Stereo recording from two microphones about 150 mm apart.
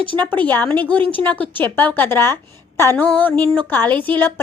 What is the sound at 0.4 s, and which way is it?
A woman's voice, 10° left (ahead or behind).